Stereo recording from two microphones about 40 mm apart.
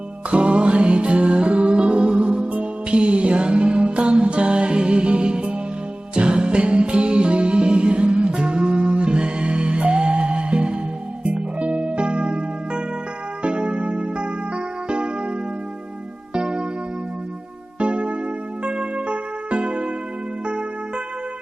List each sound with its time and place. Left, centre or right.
0.3 s music: right
16.3 s music: right
17.7 s music: right